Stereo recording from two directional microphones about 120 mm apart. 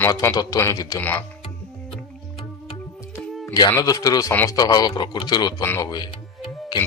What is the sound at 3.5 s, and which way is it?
A man's voice, 30° left (ahead or behind).